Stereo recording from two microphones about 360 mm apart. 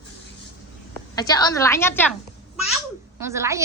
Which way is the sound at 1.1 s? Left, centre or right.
Centre.